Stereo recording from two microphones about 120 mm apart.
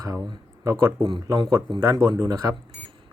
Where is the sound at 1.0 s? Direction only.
40° right (ahead or behind).